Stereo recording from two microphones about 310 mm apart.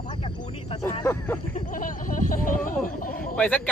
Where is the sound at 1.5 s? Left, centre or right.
Left.